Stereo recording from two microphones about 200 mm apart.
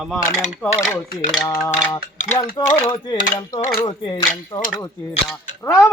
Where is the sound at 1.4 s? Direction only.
15° left (ahead or behind).